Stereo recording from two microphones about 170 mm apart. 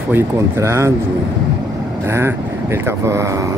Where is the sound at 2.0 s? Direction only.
15° right (ahead or behind).